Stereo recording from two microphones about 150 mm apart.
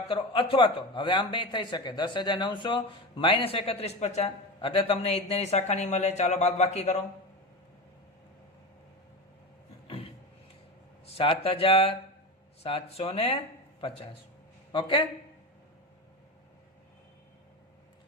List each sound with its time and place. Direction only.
0.1 s a man's voice: 35° left (ahead or behind)
9.8 s a sound: 40° left (ahead or behind)
11.0 s a man's voice: 40° left (ahead or behind)